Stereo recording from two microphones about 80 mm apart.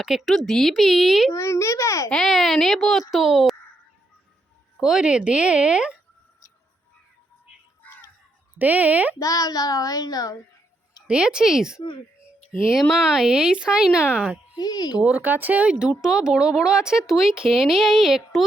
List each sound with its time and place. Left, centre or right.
0.0 s speech: centre
1.3 s a child's voice: left
2.0 s speech: centre
4.8 s speech: centre
7.8 s music: left
8.5 s speech: centre
9.1 s a child's voice: left
11.0 s speech: centre
12.9 s speech: centre
14.5 s speech: left
15.0 s speech: right; by 18.4 s centre